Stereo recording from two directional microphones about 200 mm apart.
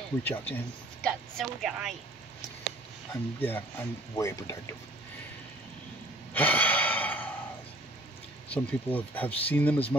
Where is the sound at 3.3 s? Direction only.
10° left (ahead or behind).